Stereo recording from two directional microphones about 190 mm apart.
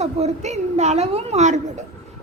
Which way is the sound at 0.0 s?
35° right (ahead or behind).